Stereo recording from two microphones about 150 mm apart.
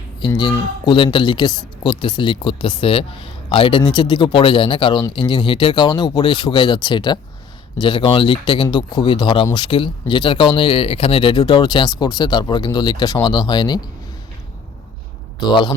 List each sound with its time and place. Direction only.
0.2 s speech: 30° left (ahead or behind)
15.4 s speech: 30° left (ahead or behind)